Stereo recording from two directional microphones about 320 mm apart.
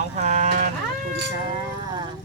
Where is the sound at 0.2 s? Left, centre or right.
Right.